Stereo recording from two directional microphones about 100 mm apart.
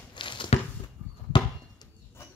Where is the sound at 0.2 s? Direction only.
55° left (ahead or behind).